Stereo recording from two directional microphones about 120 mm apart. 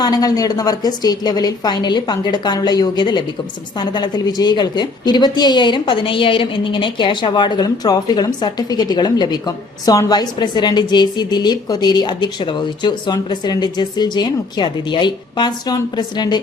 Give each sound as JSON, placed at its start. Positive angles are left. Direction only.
{"t": 0.0, "sound": "a woman's voice", "side_deg": 30}